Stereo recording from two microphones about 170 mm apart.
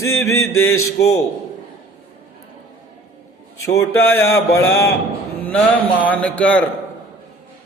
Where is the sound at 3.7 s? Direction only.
15° left (ahead or behind).